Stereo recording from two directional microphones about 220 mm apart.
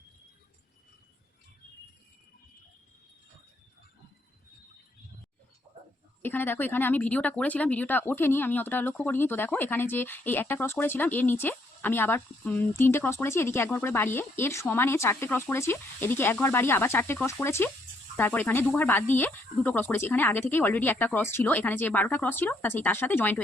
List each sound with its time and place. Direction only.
6.2 s speech: 10° left (ahead or behind)